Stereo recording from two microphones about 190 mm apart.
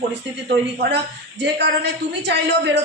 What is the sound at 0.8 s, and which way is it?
A woman's voice, 65° right (ahead or behind).